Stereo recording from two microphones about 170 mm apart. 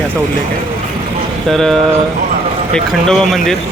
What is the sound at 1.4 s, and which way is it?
Speech, 5° left (ahead or behind).